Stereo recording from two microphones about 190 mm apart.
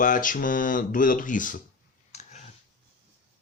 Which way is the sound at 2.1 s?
35° left (ahead or behind).